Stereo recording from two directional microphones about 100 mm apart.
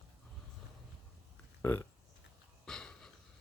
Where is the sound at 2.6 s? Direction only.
5° left (ahead or behind).